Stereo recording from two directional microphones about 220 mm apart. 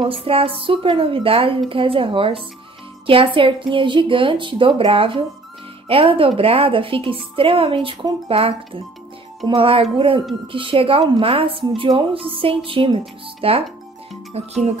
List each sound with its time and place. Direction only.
0.0 s a woman's voice: 25° right (ahead or behind)